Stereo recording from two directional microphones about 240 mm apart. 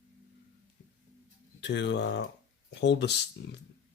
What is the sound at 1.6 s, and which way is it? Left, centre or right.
Speech, left.